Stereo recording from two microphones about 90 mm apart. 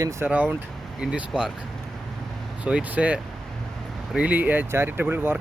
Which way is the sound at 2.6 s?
15° right (ahead or behind).